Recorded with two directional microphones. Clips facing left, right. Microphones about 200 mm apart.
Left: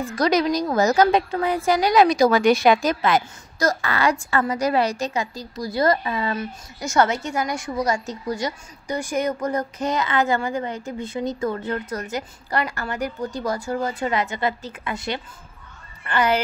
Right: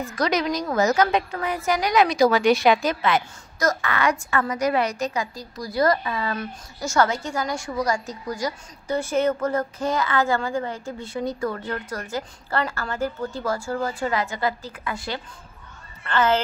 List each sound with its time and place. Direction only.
0.0 s a woman's voice: 35° left (ahead or behind); by 16.3 s 15° left (ahead or behind)